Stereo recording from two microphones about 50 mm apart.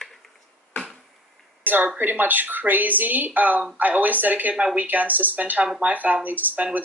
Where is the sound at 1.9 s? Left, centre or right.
Right.